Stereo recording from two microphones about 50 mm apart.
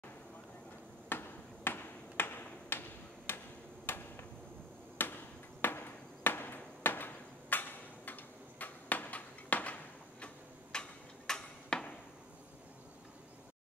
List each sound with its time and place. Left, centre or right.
1.0 s a sound: left
4.9 s chop: left
10.2 s tick-tock: centre